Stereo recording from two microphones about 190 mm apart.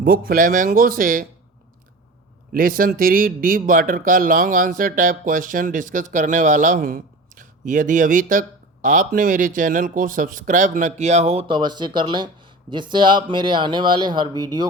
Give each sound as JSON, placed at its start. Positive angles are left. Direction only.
{"t": 0.0, "sound": "speech", "side_deg": -50}
{"t": 2.5, "sound": "speech", "side_deg": -50}
{"t": 11.4, "sound": "speech", "side_deg": -25}